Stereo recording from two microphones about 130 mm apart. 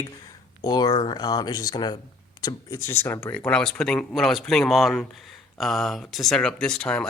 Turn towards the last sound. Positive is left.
turn(degrees=5)  # may be behind; listen again after turning